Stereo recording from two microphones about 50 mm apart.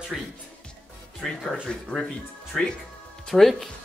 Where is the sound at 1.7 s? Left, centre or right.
Centre.